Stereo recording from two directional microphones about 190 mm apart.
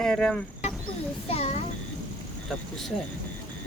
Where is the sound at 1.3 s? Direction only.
35° left (ahead or behind).